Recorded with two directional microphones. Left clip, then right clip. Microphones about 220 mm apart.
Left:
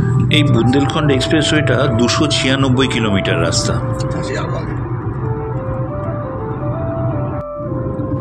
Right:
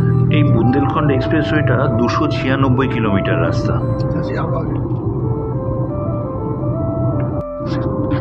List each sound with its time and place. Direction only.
0.3 s speech: 35° left (ahead or behind)